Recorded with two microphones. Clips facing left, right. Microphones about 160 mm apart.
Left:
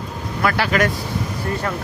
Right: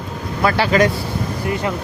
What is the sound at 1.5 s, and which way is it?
Speech, 15° right (ahead or behind).